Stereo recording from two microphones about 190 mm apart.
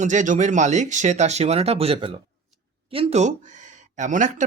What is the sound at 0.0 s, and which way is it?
Speech, 40° right (ahead or behind).